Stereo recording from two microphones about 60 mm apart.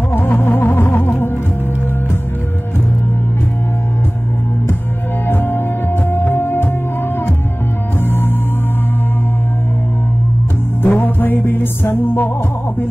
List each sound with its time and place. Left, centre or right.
0.1 s music: left
5.3 s music: left
10.8 s music: left